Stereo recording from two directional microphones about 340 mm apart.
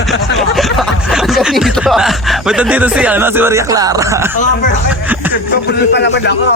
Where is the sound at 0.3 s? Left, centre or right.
Centre.